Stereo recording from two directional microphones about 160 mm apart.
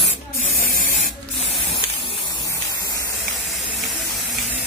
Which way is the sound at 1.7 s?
35° left (ahead or behind).